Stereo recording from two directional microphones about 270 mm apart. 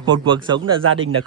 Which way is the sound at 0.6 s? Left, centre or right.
Right.